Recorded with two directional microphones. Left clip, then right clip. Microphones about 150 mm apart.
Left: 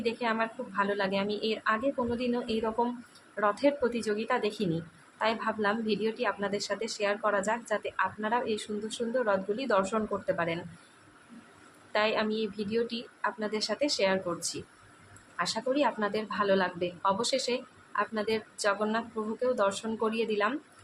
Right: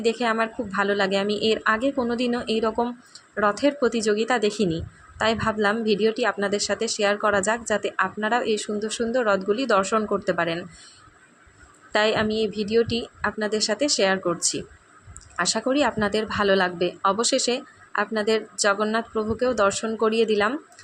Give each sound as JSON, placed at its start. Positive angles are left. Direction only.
{"t": 0.0, "sound": "speech", "side_deg": -35}
{"t": 11.9, "sound": "speech", "side_deg": -35}
{"t": 15.4, "sound": "speech", "side_deg": -35}